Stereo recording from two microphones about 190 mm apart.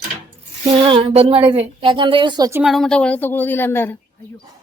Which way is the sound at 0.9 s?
30° right (ahead or behind).